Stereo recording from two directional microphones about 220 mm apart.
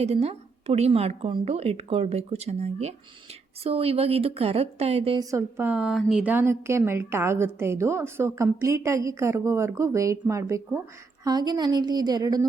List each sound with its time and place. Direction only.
0.0 s a woman's voice: 30° right (ahead or behind)